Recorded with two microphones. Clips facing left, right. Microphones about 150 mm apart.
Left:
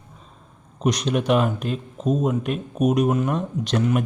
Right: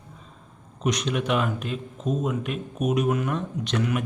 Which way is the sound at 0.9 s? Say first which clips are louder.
Left 4 dB; 35° left (ahead or behind).